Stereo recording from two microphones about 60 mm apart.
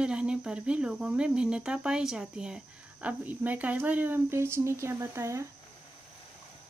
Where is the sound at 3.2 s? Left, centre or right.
Right.